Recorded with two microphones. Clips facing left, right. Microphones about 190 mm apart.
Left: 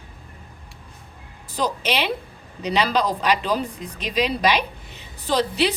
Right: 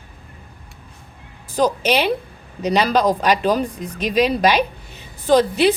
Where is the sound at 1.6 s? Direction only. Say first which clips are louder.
Right 6 dB; 45° right (ahead or behind).